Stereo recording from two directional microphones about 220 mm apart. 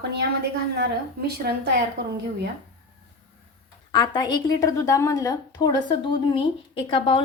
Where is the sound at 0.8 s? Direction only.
45° right (ahead or behind).